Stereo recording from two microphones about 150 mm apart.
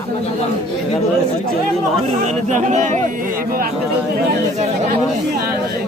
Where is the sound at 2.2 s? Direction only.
55° right (ahead or behind).